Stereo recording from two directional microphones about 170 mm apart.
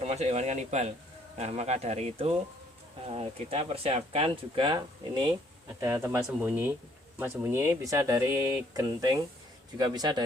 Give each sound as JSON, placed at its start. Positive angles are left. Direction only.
{"t": 0.0, "sound": "speech", "side_deg": -40}
{"t": 5.6, "sound": "speech", "side_deg": -15}